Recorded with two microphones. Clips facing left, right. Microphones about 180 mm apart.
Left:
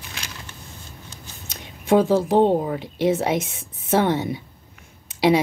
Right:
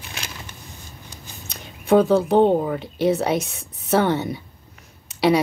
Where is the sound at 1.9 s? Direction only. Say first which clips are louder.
Right 1 dB; 25° left (ahead or behind).